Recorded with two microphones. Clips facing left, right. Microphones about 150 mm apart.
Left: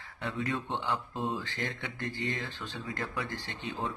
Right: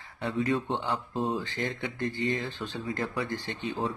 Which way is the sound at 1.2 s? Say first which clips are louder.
Right 4 dB; 35° right (ahead or behind).